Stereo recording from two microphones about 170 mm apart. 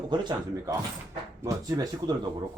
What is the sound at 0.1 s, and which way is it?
Speech, 25° right (ahead or behind).